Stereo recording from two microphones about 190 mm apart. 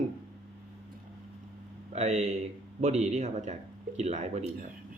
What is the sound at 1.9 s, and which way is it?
Speech, 35° right (ahead or behind).